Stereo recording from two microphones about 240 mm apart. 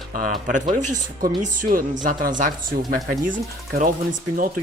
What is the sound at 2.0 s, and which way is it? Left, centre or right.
Speech, right.